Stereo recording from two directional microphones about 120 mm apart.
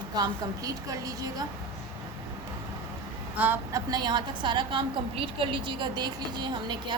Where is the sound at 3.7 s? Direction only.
35° right (ahead or behind).